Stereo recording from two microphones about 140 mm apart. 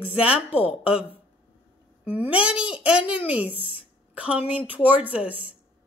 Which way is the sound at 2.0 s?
10° right (ahead or behind).